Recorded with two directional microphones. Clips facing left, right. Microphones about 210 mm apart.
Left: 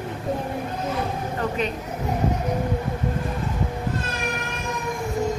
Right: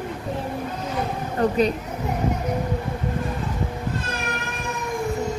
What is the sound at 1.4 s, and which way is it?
Speech, 35° right (ahead or behind).